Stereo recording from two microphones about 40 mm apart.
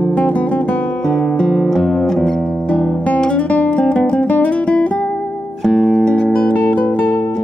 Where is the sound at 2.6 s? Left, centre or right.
Left.